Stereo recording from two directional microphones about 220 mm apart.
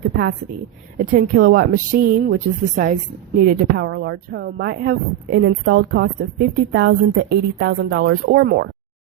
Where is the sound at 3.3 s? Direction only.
45° right (ahead or behind).